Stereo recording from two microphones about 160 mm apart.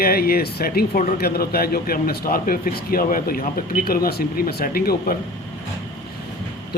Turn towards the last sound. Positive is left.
turn(degrees=70)  # may be behind; listen again after turning